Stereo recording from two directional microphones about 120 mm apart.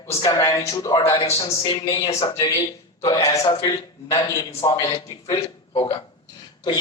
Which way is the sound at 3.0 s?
30° left (ahead or behind).